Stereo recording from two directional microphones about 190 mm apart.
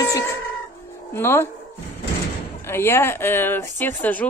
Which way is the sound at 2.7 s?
15° left (ahead or behind).